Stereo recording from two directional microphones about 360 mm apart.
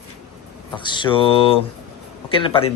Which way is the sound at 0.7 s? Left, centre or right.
Centre.